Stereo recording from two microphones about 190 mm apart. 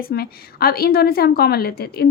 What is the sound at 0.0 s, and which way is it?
A woman's voice, 55° left (ahead or behind).